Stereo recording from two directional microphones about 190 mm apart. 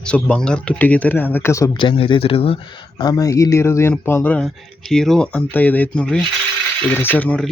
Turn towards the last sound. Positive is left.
turn(degrees=10)  # may be behind; listen again after turning